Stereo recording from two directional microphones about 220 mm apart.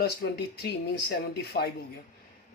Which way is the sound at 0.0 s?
50° left (ahead or behind).